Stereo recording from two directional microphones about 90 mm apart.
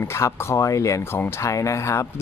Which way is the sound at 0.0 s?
30° left (ahead or behind).